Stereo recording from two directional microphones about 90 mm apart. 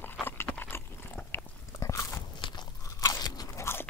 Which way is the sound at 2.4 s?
60° left (ahead or behind).